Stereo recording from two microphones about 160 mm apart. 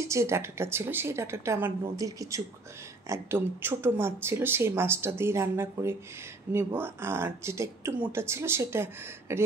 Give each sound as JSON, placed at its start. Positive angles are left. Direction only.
{"t": 0.0, "sound": "speech", "side_deg": -20}